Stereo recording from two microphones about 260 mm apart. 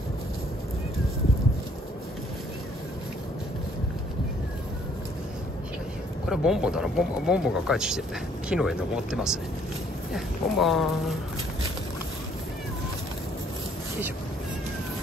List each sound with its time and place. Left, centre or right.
6.2 s speech: centre